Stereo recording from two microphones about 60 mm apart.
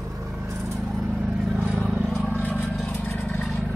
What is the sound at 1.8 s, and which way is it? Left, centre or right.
Vehicle, right.